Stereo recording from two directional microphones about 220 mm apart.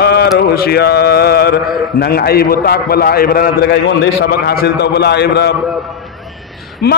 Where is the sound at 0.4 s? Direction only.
45° left (ahead or behind).